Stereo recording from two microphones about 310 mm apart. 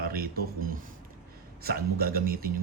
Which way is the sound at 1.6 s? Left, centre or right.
Right.